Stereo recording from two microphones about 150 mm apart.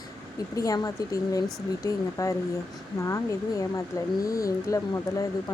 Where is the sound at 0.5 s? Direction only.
25° left (ahead or behind).